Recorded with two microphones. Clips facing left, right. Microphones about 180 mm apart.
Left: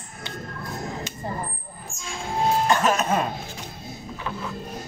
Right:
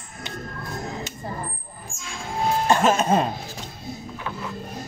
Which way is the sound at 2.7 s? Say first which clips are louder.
Right 3 dB; 25° right (ahead or behind).